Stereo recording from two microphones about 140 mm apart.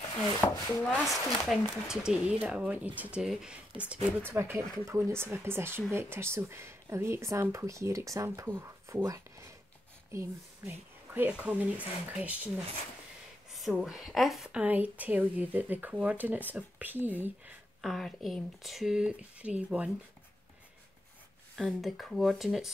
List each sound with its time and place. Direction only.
0.4 s chopping: 15° left (ahead or behind)
1.0 s speech: centre (ahead or behind)
17.8 s speech: centre (ahead or behind)
21.5 s speech: centre (ahead or behind)